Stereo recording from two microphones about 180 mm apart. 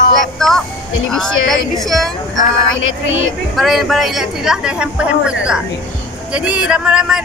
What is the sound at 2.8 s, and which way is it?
Speech, 90° left.